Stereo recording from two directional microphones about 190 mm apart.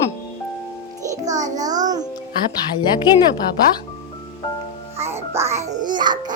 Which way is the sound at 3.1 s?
20° left (ahead or behind).